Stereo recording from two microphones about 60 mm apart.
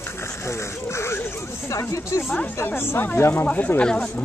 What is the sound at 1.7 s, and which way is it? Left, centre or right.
Speech, left.